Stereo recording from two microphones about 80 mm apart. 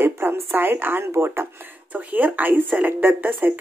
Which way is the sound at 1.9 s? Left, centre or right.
Centre.